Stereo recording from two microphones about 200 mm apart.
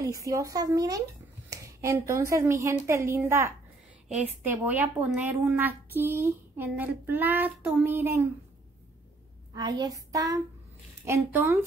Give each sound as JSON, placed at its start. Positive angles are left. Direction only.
{"t": 0.0, "sound": "a woman's voice", "side_deg": -15}
{"t": 9.5, "sound": "a woman's voice", "side_deg": -20}